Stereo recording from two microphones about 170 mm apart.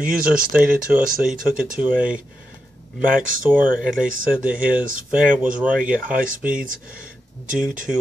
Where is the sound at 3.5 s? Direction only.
5° right (ahead or behind).